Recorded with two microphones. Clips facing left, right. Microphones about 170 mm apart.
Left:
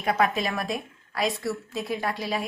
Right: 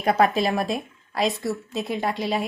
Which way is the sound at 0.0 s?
35° right (ahead or behind).